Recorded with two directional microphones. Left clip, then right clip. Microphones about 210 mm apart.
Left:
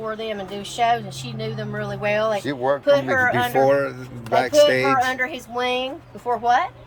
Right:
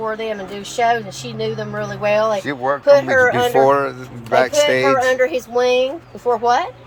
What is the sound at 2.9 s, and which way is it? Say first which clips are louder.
Speech: right 7 dB; 20° right (ahead or behind).